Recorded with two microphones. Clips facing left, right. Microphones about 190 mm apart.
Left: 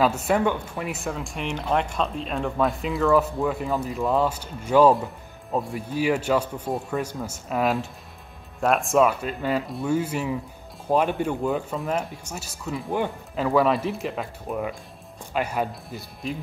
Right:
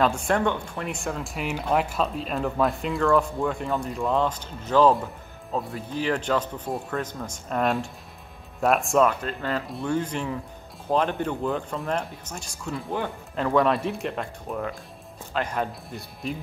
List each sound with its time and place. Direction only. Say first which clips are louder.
0.0 s speech: left 1 dB; 5° left (ahead or behind)